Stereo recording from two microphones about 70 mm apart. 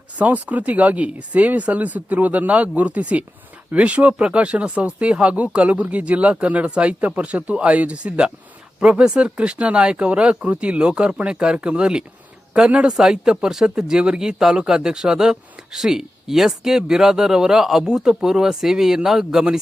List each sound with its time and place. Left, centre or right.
0.2 s speech: right